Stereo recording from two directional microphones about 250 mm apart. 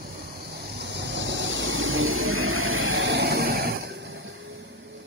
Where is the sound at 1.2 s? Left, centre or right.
Right.